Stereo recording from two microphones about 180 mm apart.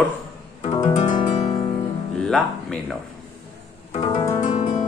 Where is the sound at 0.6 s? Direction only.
30° left (ahead or behind).